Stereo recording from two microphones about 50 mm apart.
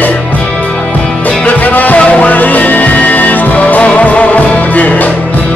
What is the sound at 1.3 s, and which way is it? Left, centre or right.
Music, left.